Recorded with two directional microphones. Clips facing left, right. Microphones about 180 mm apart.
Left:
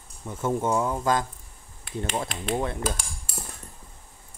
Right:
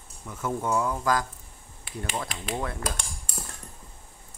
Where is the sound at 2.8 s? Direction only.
5° left (ahead or behind).